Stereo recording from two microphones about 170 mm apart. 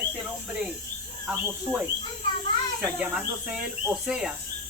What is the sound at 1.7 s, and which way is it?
Speech, 25° right (ahead or behind).